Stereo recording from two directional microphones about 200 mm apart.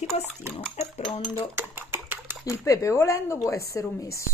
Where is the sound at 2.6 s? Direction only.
15° left (ahead or behind).